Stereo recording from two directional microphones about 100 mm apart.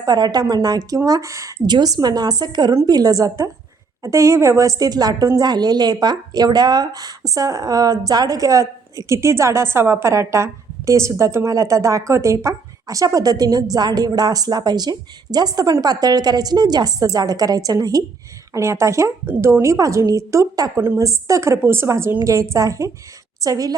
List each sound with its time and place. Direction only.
0.0 s a woman's voice: 45° right (ahead or behind)
1.6 s a woman's voice: 45° right (ahead or behind)
18.5 s a woman's voice: 30° right (ahead or behind)